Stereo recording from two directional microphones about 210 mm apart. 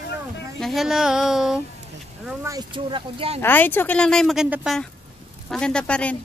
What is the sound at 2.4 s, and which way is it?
Speech, 20° right (ahead or behind).